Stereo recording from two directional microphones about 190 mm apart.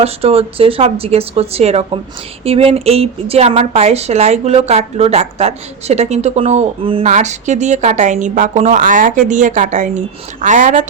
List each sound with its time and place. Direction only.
0.0 s speech: 30° right (ahead or behind)